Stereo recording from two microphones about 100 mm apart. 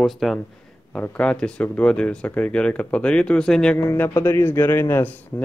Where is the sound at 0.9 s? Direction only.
10° left (ahead or behind).